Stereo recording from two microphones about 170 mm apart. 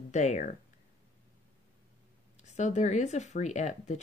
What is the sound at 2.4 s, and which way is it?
Speech, 45° left (ahead or behind).